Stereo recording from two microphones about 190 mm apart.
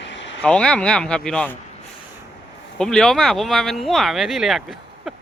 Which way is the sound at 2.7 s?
5° left (ahead or behind).